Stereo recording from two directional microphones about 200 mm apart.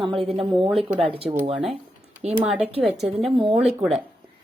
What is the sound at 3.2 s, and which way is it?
Speech, 25° right (ahead or behind).